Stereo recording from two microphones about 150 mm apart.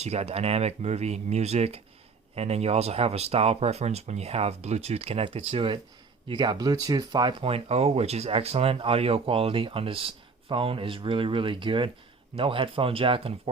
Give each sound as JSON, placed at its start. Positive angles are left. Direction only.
{"t": 0.0, "sound": "speech", "side_deg": -45}